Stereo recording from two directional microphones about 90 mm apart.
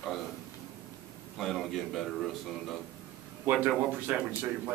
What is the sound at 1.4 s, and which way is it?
Speech, 5° left (ahead or behind).